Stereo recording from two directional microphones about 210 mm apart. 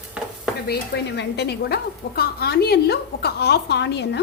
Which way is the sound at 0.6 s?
55° left (ahead or behind).